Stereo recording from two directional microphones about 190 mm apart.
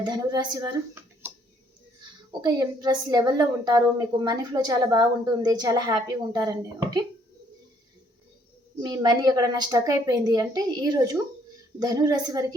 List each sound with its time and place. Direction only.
0.0 s a woman's voice: 20° right (ahead or behind)
2.4 s a woman's voice: 20° right (ahead or behind)
8.8 s a woman's voice: 20° right (ahead or behind)